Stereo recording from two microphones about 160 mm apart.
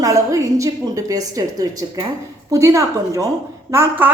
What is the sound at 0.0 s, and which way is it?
A woman's voice, 20° right (ahead or behind).